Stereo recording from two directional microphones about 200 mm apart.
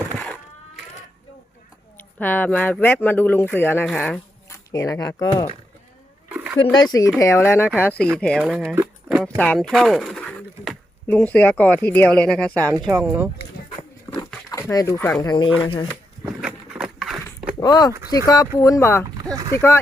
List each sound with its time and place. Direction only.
2.0 s speech: 10° left (ahead or behind)
4.5 s speech: 15° left (ahead or behind)
6.2 s a sound: 5° right (ahead or behind)
6.7 s speech: 20° left (ahead or behind); by 8.4 s 5° left (ahead or behind)
8.7 s a sound: 5° right (ahead or behind)
9.4 s speech: 5° left (ahead or behind)
13.0 s speech: 10° right (ahead or behind)
14.7 s speech: 15° left (ahead or behind)
15.6 s speech: 25° left (ahead or behind)
16.4 s a sound: 5° right (ahead or behind)
17.6 s speech: 20° left (ahead or behind)
19.3 s speech: 15° right (ahead or behind)
19.5 s speech: 15° left (ahead or behind)